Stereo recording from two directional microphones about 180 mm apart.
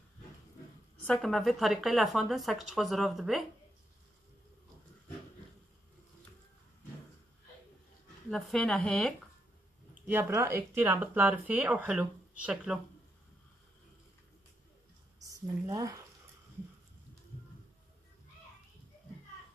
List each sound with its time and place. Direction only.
1.0 s a woman's voice: centre (ahead or behind)
8.3 s a woman's voice: centre (ahead or behind)
10.0 s speech: 15° right (ahead or behind)
15.2 s speech: 20° right (ahead or behind)